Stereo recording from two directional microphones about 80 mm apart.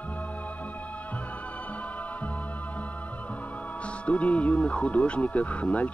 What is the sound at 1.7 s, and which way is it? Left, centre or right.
Music, centre.